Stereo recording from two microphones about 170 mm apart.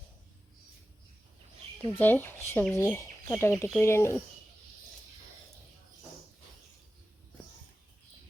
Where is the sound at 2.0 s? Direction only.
10° left (ahead or behind).